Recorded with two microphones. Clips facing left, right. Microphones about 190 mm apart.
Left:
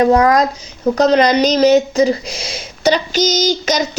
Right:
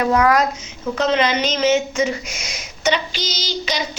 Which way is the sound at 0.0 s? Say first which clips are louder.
Left 5 dB; 35° left (ahead or behind).